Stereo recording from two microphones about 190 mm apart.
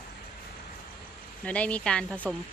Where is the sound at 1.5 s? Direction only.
5° left (ahead or behind).